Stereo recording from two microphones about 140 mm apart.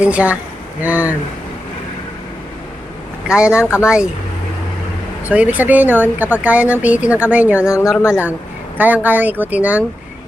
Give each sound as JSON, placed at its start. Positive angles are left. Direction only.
{"t": 0.0, "sound": "speech", "side_deg": -10}
{"t": 3.2, "sound": "speech", "side_deg": -5}
{"t": 3.6, "sound": "speech", "side_deg": 20}
{"t": 3.8, "sound": "speech", "side_deg": -5}
{"t": 5.3, "sound": "speech", "side_deg": -10}
{"t": 7.9, "sound": "a woman's voice", "side_deg": 15}
{"t": 8.8, "sound": "speech", "side_deg": -10}